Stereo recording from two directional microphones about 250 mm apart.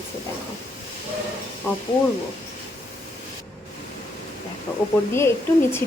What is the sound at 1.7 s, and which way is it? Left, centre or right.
Speech, centre.